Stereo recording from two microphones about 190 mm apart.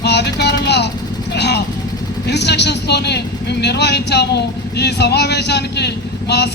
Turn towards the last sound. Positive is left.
turn(degrees=60)  # may be behind; listen again after turning